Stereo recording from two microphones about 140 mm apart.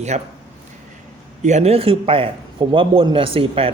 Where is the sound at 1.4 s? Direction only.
55° right (ahead or behind).